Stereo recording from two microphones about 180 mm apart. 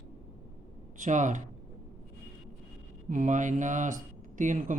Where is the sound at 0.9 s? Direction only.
45° right (ahead or behind).